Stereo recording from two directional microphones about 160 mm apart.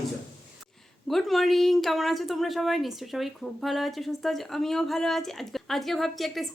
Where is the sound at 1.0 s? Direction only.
Centre (ahead or behind).